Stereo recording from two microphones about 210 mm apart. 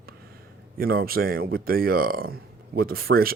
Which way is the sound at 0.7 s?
45° right (ahead or behind).